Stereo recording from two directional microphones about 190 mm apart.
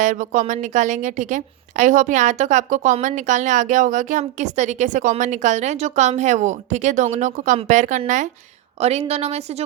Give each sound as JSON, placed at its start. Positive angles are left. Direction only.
{"t": 0.0, "sound": "a woman's voice", "side_deg": -40}